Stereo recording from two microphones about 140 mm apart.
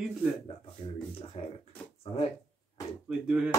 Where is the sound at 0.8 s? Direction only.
50° left (ahead or behind).